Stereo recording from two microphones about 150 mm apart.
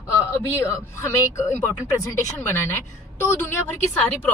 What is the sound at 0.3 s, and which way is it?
A woman's voice, 20° left (ahead or behind).